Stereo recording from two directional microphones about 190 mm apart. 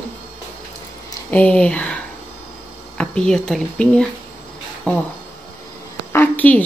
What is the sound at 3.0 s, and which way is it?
Speech, 5° left (ahead or behind).